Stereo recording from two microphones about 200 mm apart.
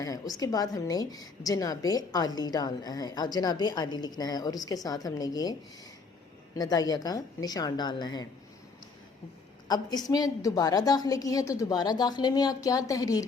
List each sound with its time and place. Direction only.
0.0 s a woman's voice: 20° left (ahead or behind)
6.6 s a woman's voice: 20° left (ahead or behind)
9.6 s a woman's voice: 20° left (ahead or behind)